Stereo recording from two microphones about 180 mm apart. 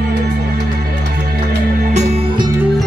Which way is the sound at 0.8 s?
55° right (ahead or behind).